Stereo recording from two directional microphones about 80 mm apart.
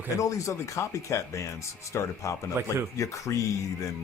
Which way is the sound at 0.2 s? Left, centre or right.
Left.